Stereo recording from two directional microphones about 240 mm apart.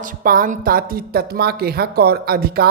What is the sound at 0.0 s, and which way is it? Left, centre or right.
A woman's voice, right.